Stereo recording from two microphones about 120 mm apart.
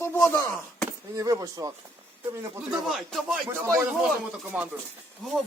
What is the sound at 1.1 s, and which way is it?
Speech, 30° right (ahead or behind).